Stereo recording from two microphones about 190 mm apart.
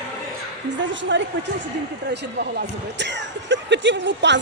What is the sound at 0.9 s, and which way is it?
Speech, 75° right (ahead or behind).